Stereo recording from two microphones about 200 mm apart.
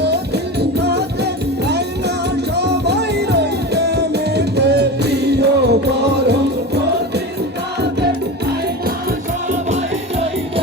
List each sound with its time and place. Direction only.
0.6 s music: 55° right (ahead or behind)